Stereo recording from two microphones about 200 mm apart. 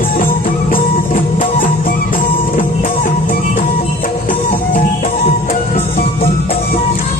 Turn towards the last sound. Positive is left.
turn(degrees=40)  # may be behind; listen again after turning